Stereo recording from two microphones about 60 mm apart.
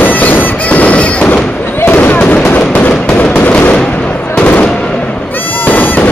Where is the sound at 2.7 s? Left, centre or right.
Left.